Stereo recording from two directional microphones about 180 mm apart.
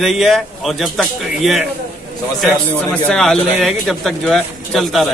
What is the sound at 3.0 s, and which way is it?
Speech, 5° left (ahead or behind).